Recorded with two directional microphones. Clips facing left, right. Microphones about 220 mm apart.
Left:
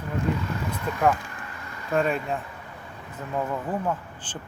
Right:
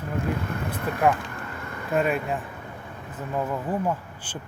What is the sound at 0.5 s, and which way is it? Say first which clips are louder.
Speech: right 1 dB; 55° right (ahead or behind).